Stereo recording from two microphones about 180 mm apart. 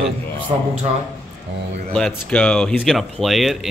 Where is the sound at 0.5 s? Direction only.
30° right (ahead or behind).